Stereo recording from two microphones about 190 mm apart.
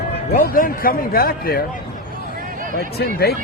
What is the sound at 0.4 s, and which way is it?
A man's voice, 50° left (ahead or behind).